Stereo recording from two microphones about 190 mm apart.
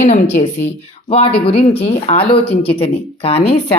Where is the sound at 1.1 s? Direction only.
30° left (ahead or behind).